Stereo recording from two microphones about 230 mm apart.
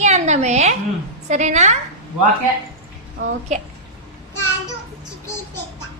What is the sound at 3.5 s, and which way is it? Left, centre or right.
Speech, right.